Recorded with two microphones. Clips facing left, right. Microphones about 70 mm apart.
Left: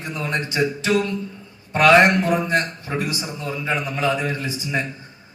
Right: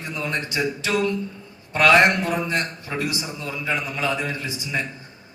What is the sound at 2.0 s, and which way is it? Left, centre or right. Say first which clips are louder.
A man's voice: left 2 dB; left.